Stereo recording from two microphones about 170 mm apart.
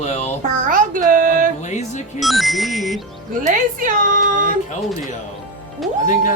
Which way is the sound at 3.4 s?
50° right (ahead or behind).